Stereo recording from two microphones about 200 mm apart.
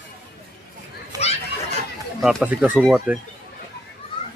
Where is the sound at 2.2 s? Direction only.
Centre (ahead or behind).